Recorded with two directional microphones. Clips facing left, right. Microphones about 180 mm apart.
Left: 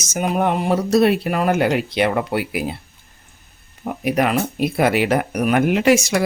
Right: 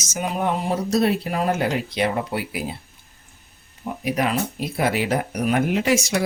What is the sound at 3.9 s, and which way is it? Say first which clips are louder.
Speech: left 4 dB; 60° left (ahead or behind).